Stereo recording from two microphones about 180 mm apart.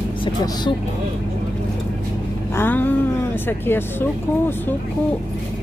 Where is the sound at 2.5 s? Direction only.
10° left (ahead or behind).